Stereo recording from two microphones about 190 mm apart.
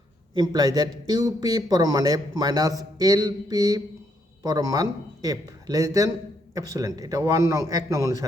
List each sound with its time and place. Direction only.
0.3 s a man's voice: 20° right (ahead or behind)